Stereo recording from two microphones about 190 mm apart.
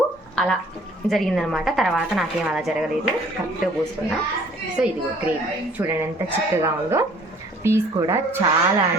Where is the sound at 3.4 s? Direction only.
15° right (ahead or behind).